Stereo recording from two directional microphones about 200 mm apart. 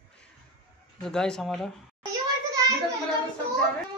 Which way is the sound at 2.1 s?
15° right (ahead or behind).